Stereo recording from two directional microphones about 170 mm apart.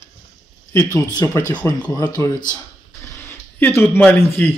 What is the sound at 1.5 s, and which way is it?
Speech, 10° left (ahead or behind).